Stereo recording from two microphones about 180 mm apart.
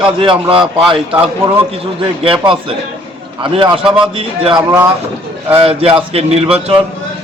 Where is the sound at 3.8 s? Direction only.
5° right (ahead or behind).